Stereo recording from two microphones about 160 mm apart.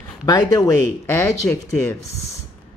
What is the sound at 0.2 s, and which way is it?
Speech, 25° left (ahead or behind).